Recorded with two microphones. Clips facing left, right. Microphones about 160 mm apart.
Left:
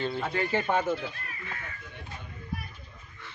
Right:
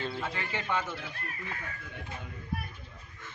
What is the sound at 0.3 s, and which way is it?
Speech, 50° left (ahead or behind).